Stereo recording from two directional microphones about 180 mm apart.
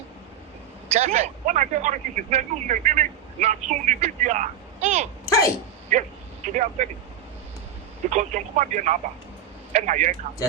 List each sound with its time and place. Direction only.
0.9 s speech: 40° right (ahead or behind)
5.2 s sneeze: 20° left (ahead or behind)
5.9 s speech: 40° right (ahead or behind)
8.1 s speech: 40° right (ahead or behind)